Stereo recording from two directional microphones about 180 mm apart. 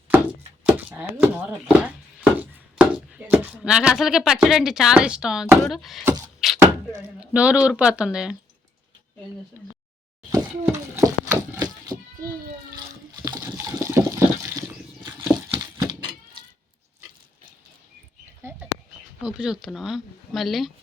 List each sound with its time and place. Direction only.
0.6 s speech: 10° right (ahead or behind)
6.4 s a sound: centre (ahead or behind)
7.2 s speech: 5° right (ahead or behind)
10.2 s a sound: 15° right (ahead or behind)
12.7 s water: 20° right (ahead or behind)
18.4 s bird: 15° right (ahead or behind)
19.2 s speech: 5° right (ahead or behind)